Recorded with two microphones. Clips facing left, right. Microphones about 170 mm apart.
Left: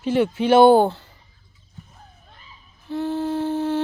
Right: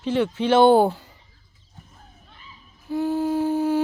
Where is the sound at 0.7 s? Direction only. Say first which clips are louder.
Even; 10° right (ahead or behind).